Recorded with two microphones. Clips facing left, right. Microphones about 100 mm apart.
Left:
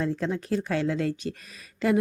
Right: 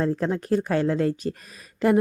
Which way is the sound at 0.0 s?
45° right (ahead or behind).